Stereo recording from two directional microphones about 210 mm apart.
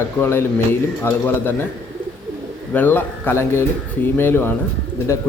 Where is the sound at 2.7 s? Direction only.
10° left (ahead or behind).